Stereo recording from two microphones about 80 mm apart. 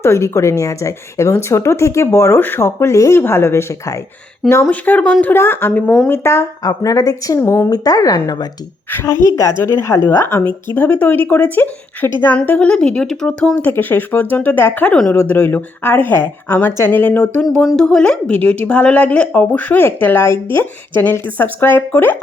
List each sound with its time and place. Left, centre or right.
0.0 s speech: left
4.7 s a woman's voice: centre
6.6 s a woman's voice: left
7.3 s speech: left
7.7 s a woman's voice: left
8.9 s a woman's voice: left
9.3 s a woman's voice: left; by 13.6 s centre
13.6 s a woman's voice: left
17.7 s a woman's voice: centre; by 22.1 s left